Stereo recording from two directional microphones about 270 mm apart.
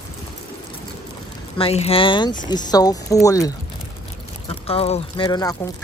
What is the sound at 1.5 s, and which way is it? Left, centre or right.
Speech, left.